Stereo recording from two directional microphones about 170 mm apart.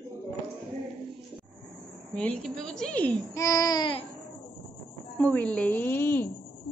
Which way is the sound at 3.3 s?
20° left (ahead or behind).